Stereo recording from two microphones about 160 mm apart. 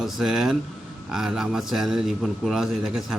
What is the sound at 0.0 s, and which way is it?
A man's voice, 5° right (ahead or behind).